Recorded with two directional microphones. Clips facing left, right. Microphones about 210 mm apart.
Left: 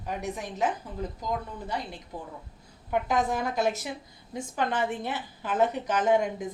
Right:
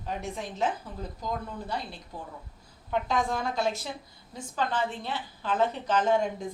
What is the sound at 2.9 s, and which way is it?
A woman's voice, 15° left (ahead or behind).